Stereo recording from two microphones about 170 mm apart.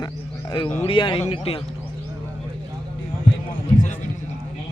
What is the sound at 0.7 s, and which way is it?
Speech, 35° left (ahead or behind).